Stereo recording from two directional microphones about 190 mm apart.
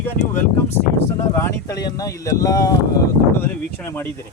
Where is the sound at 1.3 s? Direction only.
15° left (ahead or behind).